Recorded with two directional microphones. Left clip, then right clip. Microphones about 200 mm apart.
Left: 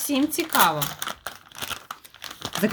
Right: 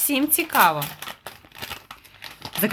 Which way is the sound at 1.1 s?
15° left (ahead or behind).